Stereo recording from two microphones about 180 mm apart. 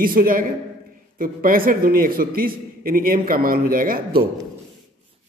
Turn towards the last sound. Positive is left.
turn(degrees=-55)  # may be behind; listen again after turning